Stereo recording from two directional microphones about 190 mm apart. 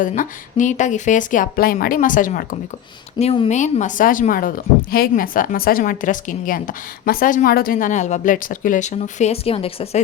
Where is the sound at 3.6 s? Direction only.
40° left (ahead or behind).